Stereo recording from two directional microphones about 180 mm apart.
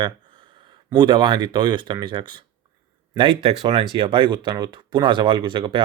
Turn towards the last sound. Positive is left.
turn(degrees=-25)  # may be behind; listen again after turning